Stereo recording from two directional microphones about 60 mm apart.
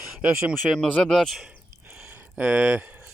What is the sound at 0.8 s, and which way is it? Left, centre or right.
Speech, left.